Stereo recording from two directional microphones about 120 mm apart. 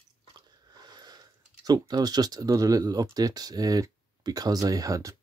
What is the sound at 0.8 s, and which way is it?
Speech, 35° right (ahead or behind).